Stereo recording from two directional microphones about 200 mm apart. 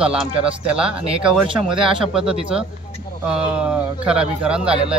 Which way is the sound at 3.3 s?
5° right (ahead or behind).